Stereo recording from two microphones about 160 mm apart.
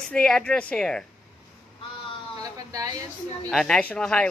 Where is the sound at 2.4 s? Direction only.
25° right (ahead or behind).